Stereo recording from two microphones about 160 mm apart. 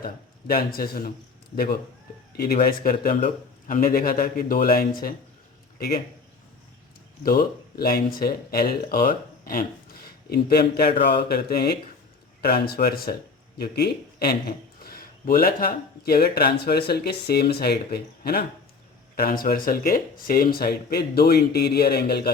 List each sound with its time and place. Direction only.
0.0 s a man's voice: 65° left (ahead or behind)
7.2 s a man's voice: 70° left (ahead or behind)
10.2 s a man's voice: 75° left (ahead or behind)
13.6 s a man's voice: 85° left
19.1 s a man's voice: 65° left (ahead or behind)